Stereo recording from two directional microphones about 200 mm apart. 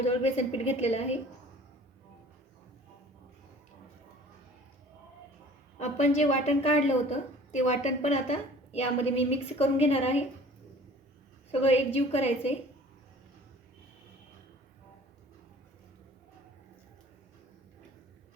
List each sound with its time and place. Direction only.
0.0 s a woman's voice: 30° left (ahead or behind)
5.8 s a woman's voice: 35° left (ahead or behind)
11.6 s a woman's voice: 30° left (ahead or behind)